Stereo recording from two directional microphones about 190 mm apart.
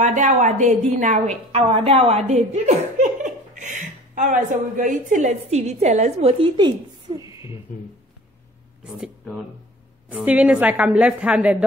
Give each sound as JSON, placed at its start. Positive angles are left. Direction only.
{"t": 0.0, "sound": "a woman's voice", "side_deg": -40}
{"t": 8.8, "sound": "a sound", "side_deg": -5}
{"t": 10.0, "sound": "a woman's voice", "side_deg": -5}